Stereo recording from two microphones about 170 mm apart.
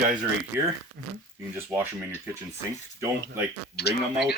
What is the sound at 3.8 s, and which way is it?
Speech, 70° left (ahead or behind).